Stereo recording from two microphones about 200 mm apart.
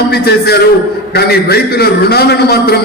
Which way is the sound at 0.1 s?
55° left (ahead or behind).